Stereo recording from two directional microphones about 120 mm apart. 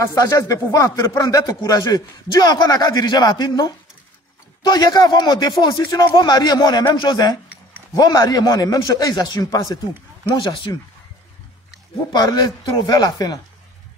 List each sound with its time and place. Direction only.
0.0 s speech: 30° left (ahead or behind)
12.1 s speech: 30° left (ahead or behind)